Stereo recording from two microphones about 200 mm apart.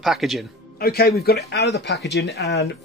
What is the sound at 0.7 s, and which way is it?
Speech, 50° left (ahead or behind).